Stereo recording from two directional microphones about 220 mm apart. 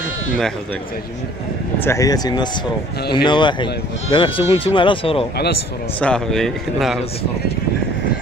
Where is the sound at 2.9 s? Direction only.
45° left (ahead or behind).